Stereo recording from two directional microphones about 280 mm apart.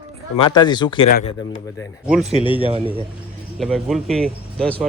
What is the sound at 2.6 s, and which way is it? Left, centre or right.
Speech, centre.